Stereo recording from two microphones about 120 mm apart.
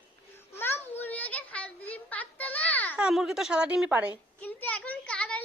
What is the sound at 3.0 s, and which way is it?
A woman's voice, 5° right (ahead or behind).